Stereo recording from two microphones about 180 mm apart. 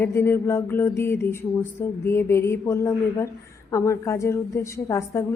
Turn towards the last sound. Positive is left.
turn(degrees=15)  # may be behind; listen again after turning